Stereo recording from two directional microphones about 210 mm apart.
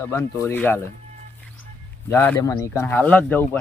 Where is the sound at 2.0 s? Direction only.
10° left (ahead or behind).